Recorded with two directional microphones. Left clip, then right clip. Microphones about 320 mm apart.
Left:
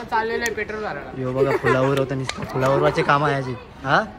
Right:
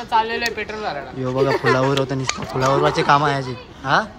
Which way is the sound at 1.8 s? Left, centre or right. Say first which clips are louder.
Right 1 dB; centre.